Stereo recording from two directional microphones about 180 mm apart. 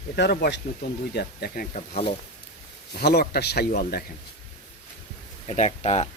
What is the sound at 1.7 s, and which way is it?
Speech, 40° left (ahead or behind).